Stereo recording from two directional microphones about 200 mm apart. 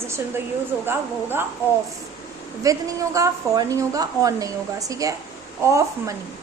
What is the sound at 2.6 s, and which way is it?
A woman's voice, 15° right (ahead or behind).